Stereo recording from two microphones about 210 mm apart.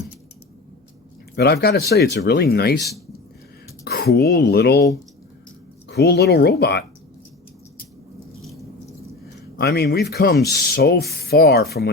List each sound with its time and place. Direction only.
1.4 s speech: 50° left (ahead or behind)
3.8 s speech: 50° left (ahead or behind)
5.9 s speech: 50° left (ahead or behind)
9.6 s speech: 50° left (ahead or behind)